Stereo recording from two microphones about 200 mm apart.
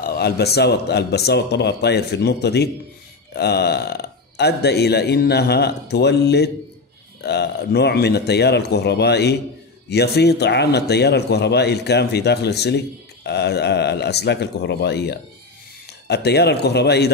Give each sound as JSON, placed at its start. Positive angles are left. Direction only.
{"t": 0.0, "sound": "speech", "side_deg": 50}